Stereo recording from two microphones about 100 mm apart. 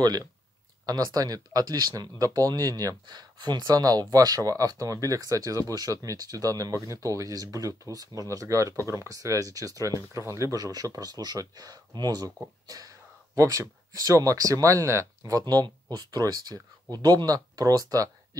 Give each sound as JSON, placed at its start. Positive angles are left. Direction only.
{"t": 0.8, "sound": "speech", "side_deg": -40}